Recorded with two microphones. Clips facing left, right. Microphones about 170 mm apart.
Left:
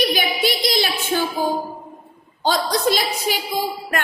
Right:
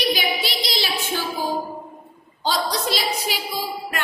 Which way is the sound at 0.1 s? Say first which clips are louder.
Left 3 dB; 50° left (ahead or behind).